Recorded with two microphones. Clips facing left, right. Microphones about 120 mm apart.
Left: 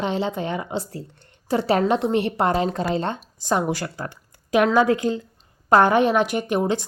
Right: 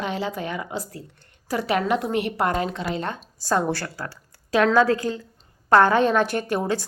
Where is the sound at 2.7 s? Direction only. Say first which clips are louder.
Left 4 dB; 40° left (ahead or behind).